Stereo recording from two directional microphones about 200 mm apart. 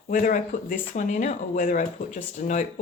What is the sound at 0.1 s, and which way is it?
Speech, 40° left (ahead or behind).